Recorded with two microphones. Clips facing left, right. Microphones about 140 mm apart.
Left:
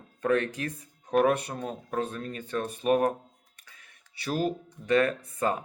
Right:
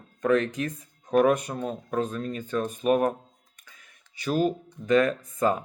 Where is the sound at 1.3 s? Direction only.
35° left (ahead or behind).